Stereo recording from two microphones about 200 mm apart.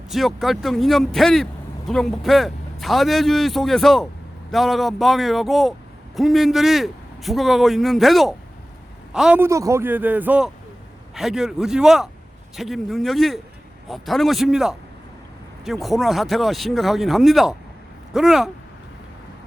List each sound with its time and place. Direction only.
0.1 s a man's voice: centre (ahead or behind)